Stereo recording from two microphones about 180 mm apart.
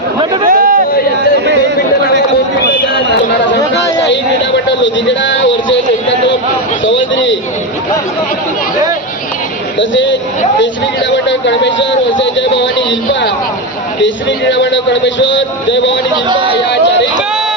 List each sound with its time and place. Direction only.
0.4 s a sound: 50° right (ahead or behind)
3.9 s a sound: 80° left
6.8 s a man's voice: 90° left
9.7 s a man's voice: 90° left
16.3 s speech: 25° right (ahead or behind)
16.6 s speech: 75° left (ahead or behind)